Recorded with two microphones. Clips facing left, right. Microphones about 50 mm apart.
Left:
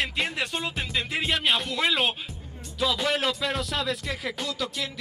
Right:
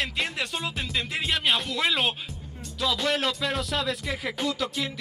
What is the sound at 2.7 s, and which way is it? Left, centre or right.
Speech, centre.